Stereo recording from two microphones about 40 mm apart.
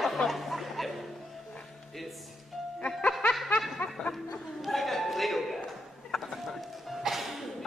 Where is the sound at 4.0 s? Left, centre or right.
Centre.